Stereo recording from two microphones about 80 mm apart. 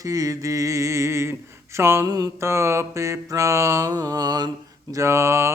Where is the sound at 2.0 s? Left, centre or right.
Right.